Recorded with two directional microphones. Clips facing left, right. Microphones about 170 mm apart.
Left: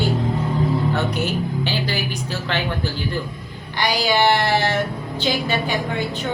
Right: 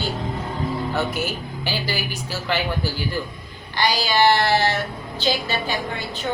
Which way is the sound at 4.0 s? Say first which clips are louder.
Left 1 dB; 15° left (ahead or behind).